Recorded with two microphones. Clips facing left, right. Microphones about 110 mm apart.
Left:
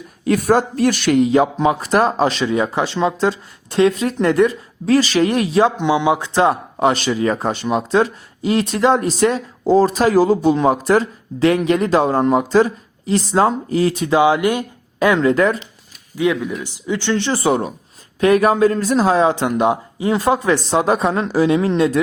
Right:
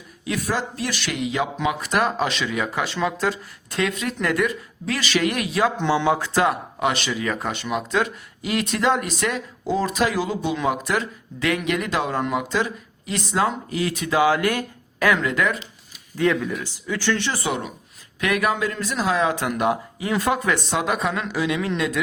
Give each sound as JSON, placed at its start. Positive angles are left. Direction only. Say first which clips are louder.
{"t": 0.3, "sound": "speech", "louder": "left 10 dB", "side_deg": 50}
{"t": 5.7, "sound": "speech", "louder": "left 4 dB", "side_deg": 15}
{"t": 16.1, "sound": "speech", "louder": "left 3 dB", "side_deg": 10}